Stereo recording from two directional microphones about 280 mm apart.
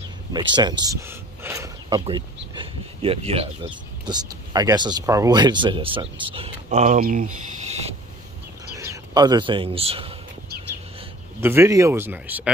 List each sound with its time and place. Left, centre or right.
0.3 s pulleys: centre
2.5 s speech: centre
8.7 s speech: centre
11.4 s speech: centre